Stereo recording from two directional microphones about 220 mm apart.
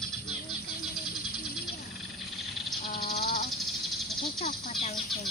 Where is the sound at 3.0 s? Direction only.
40° left (ahead or behind).